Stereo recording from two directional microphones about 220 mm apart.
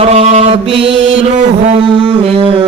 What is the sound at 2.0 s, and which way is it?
Speech, 25° right (ahead or behind).